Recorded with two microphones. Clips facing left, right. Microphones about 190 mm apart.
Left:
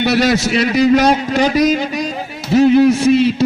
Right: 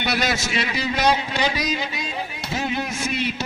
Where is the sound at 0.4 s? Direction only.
40° left (ahead or behind).